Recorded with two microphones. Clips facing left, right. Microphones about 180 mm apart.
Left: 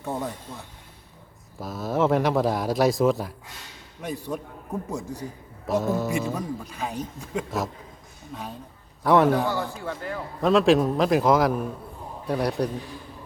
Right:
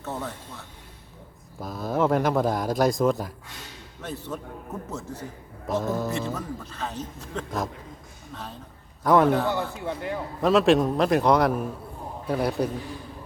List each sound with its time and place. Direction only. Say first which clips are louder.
0.0 s a man's voice: left 3 dB; 15° left (ahead or behind)
1.5 s speech: left 1 dB; centre (ahead or behind)
4.0 s a man's voice: left 3 dB; 15° left (ahead or behind)
5.6 s a man's voice: left 2 dB; 5° left (ahead or behind)
9.8 s a man's voice: right 2 dB; 20° right (ahead or behind)
10.4 s speech: even; centre (ahead or behind)